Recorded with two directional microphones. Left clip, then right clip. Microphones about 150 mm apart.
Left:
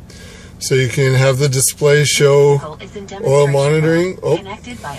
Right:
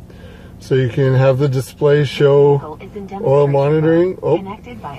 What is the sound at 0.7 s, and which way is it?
Speech, 10° left (ahead or behind).